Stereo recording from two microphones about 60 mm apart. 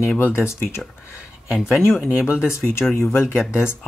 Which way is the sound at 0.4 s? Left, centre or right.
Left.